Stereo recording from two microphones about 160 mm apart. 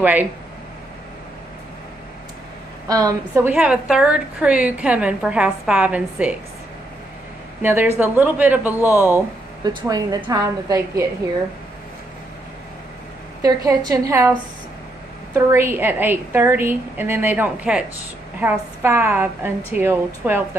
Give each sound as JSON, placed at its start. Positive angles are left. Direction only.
{"t": 0.0, "sound": "a woman's voice", "side_deg": -10}
{"t": 2.9, "sound": "a woman's voice", "side_deg": -20}
{"t": 3.4, "sound": "a woman's voice", "side_deg": -10}
{"t": 7.6, "sound": "a woman's voice", "side_deg": -10}
{"t": 9.6, "sound": "a woman's voice", "side_deg": -25}
{"t": 13.4, "sound": "a woman's voice", "side_deg": -25}